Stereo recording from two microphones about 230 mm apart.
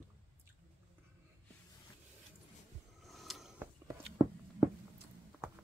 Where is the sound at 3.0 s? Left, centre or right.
Centre.